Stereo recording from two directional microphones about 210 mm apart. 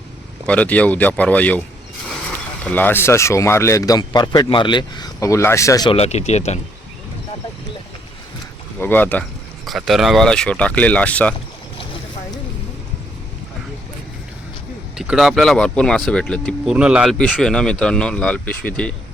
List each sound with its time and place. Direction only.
0.4 s a man's voice: 5° left (ahead or behind)
2.6 s a man's voice: 10° left (ahead or behind); by 6.6 s 30° left (ahead or behind)
8.8 s a man's voice: 10° left (ahead or behind)
14.9 s speech: centre (ahead or behind)